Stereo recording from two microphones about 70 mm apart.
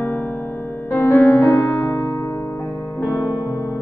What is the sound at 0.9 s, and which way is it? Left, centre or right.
Music, left.